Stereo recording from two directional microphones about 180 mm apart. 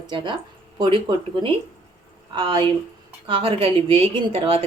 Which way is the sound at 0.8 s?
25° right (ahead or behind).